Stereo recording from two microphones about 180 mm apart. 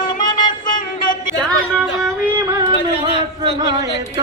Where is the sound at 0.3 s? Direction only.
25° left (ahead or behind).